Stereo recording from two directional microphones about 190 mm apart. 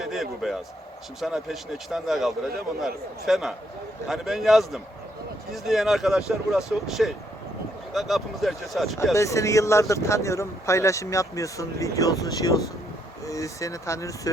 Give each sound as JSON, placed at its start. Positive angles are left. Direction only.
{"t": 0.0, "sound": "a man's voice", "side_deg": 0}
{"t": 9.1, "sound": "speech", "side_deg": 15}